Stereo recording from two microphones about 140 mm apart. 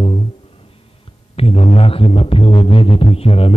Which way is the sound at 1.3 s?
45° left (ahead or behind).